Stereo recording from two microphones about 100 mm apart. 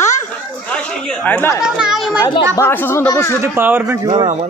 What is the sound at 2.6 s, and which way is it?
Speech, 25° left (ahead or behind).